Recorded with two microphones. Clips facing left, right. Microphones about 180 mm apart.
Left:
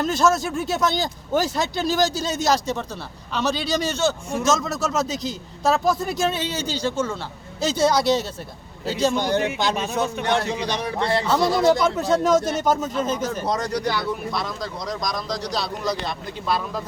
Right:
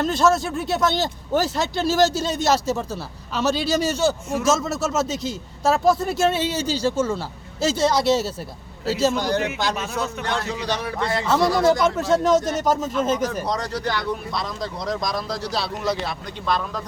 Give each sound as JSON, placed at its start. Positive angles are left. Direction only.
{"t": 0.0, "sound": "speech", "side_deg": 0}
{"t": 9.1, "sound": "speech", "side_deg": 20}
{"t": 11.0, "sound": "speech", "side_deg": 30}
{"t": 11.6, "sound": "speech", "side_deg": 0}
{"t": 13.4, "sound": "speech", "side_deg": 20}
{"t": 14.8, "sound": "speech", "side_deg": 0}